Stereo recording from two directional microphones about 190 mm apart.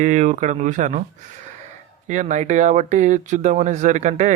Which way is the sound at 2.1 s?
40° right (ahead or behind).